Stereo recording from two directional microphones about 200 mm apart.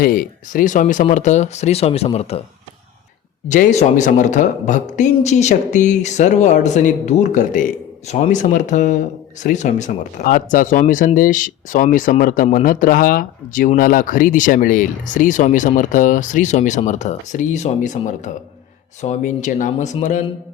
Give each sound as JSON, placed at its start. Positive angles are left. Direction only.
{"t": 0.0, "sound": "a man's voice", "side_deg": 45}
{"t": 3.5, "sound": "a man's voice", "side_deg": 35}